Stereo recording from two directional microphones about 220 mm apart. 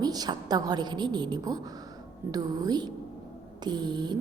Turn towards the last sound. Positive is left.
turn(degrees=-20)  # may be behind; listen again after turning